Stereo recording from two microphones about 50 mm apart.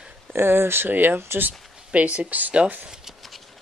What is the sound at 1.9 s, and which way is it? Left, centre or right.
Speech, right.